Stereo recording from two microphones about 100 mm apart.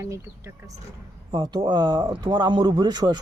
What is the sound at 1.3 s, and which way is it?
Speech, 45° right (ahead or behind).